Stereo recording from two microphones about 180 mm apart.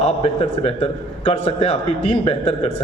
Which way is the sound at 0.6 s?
35° left (ahead or behind).